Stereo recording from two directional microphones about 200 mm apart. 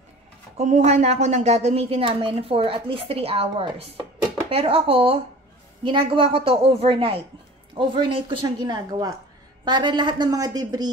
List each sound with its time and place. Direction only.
0.6 s a woman's voice: 35° right (ahead or behind); by 10.9 s 20° right (ahead or behind)